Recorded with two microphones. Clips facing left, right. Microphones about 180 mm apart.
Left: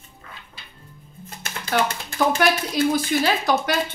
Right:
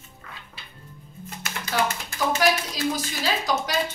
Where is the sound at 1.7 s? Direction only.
60° left (ahead or behind).